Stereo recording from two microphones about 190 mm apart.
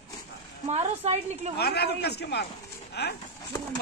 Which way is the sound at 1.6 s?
60° left (ahead or behind).